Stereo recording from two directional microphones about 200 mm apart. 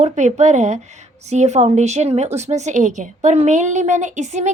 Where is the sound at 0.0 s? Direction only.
35° right (ahead or behind).